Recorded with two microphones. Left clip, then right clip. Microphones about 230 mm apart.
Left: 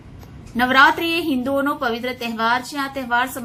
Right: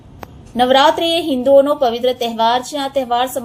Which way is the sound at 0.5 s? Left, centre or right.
Centre.